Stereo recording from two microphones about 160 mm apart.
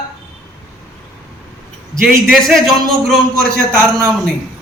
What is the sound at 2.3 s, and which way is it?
Speech, centre (ahead or behind).